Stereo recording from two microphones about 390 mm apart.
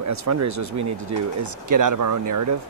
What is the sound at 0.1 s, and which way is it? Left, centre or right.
Speech, right.